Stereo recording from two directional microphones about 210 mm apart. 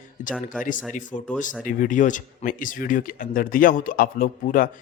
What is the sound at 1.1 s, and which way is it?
Speech, 35° left (ahead or behind).